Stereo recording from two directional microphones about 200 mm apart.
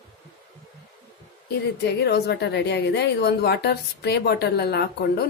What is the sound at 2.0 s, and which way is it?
A woman's voice, 55° left (ahead or behind).